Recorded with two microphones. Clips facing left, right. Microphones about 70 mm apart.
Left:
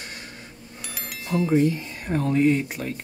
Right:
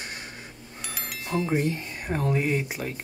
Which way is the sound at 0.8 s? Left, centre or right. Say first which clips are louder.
Even; centre.